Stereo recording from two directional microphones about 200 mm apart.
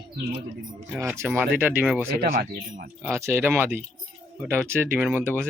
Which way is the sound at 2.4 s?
50° right (ahead or behind).